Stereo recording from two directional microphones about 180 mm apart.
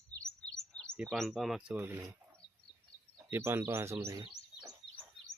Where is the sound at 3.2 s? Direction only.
10° right (ahead or behind).